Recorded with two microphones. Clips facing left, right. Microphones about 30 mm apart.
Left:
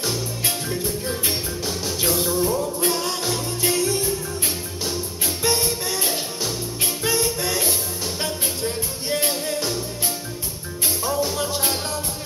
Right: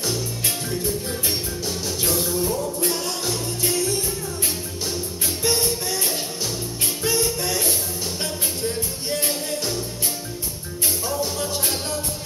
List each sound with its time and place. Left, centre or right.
0.7 s music: centre
5.4 s music: centre
9.2 s music: centre
11.2 s music: left